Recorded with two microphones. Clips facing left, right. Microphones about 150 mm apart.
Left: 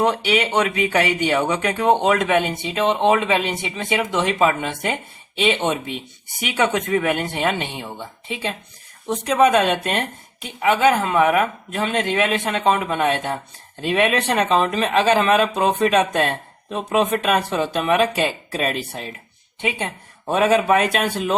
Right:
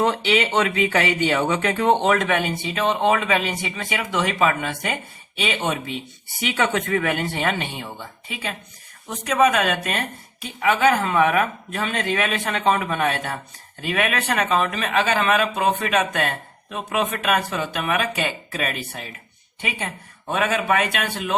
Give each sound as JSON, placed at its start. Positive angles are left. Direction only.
{"t": 0.0, "sound": "speech", "side_deg": 15}